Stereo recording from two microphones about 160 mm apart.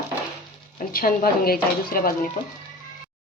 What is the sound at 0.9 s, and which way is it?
Speech, 70° left (ahead or behind).